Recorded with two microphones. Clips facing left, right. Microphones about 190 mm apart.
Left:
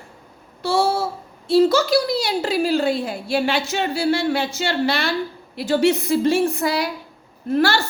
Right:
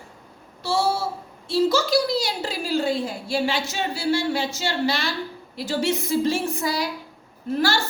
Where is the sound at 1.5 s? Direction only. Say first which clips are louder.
Left 5 dB; 60° left (ahead or behind).